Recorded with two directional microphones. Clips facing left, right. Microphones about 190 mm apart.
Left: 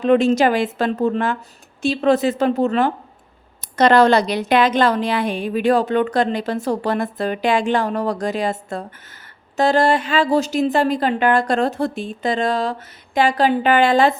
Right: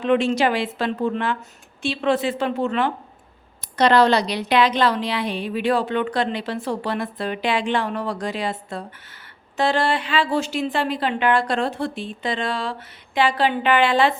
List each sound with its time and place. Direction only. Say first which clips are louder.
0.0 s a woman's voice: left 4 dB; 40° left (ahead or behind)